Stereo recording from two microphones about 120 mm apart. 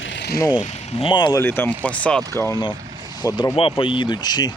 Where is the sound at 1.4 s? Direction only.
20° left (ahead or behind).